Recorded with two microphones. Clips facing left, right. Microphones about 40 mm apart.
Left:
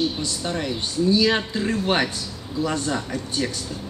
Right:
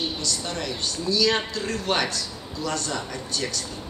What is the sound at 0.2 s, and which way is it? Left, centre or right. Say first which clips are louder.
A man's voice: left 3 dB; left.